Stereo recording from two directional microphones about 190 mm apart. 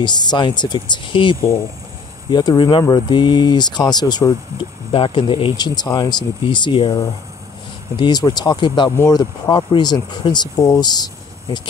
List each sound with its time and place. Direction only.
0.0 s speech: 20° left (ahead or behind)